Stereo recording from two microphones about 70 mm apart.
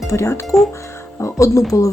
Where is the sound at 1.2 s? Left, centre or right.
Left.